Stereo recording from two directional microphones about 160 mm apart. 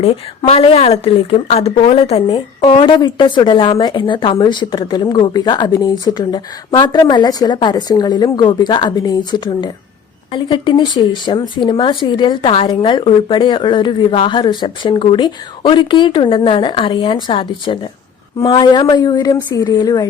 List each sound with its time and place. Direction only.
0.0 s a woman's voice: 40° left (ahead or behind); by 20.1 s 25° left (ahead or behind)